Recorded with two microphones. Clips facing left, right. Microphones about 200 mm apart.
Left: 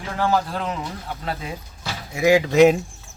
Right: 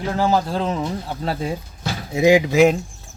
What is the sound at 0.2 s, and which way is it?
Speech, 25° right (ahead or behind).